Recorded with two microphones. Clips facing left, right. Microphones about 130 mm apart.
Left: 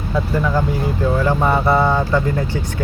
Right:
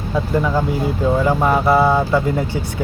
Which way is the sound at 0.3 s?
15° right (ahead or behind).